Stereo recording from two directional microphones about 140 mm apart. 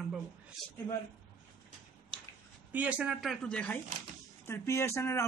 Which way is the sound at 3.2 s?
Centre (ahead or behind).